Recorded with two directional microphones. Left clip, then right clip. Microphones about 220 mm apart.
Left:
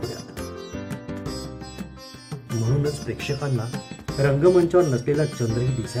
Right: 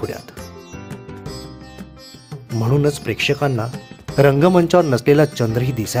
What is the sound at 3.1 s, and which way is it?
Speech, 30° right (ahead or behind).